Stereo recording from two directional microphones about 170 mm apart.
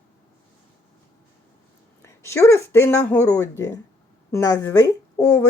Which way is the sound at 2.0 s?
15° left (ahead or behind).